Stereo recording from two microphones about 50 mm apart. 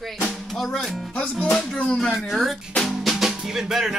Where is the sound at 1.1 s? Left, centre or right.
Left.